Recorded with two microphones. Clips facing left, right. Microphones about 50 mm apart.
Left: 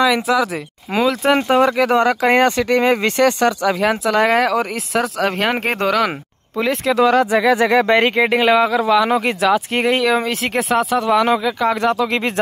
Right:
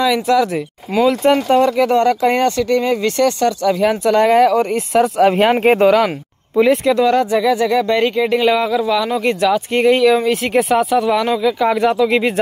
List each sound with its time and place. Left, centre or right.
0.0 s speech: centre; by 3.1 s left
3.2 s speech: left
3.8 s speech: centre
7.3 s speech: left
9.4 s speech: centre